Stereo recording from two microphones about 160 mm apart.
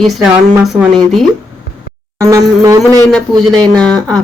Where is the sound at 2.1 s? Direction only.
20° right (ahead or behind).